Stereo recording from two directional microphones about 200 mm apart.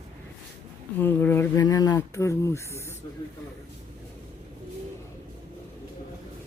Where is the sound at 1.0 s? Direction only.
10° left (ahead or behind).